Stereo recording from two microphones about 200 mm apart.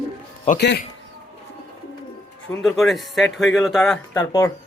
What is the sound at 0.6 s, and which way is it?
Speech, 55° left (ahead or behind).